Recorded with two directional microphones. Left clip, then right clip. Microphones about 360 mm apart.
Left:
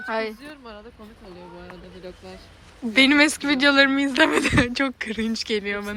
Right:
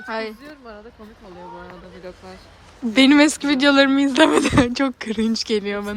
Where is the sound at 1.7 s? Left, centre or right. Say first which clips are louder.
Right 2 dB; centre.